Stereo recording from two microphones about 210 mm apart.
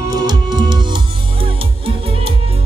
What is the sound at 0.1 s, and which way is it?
Music, 20° right (ahead or behind).